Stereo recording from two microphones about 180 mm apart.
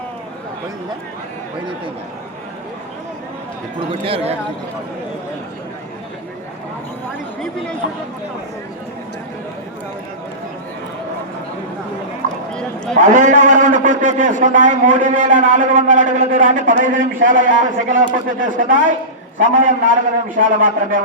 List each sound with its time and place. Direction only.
4.0 s speech: 35° right (ahead or behind)
12.2 s clip-clop: 45° right (ahead or behind)
13.0 s a man's voice: 45° right (ahead or behind)